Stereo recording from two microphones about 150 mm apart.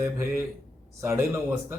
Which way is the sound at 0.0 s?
15° right (ahead or behind).